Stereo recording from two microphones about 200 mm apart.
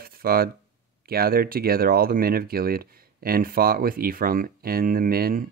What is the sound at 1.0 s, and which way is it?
Speech, 50° right (ahead or behind).